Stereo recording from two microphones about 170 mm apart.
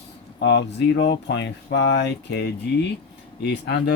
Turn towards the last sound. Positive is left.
turn(degrees=80)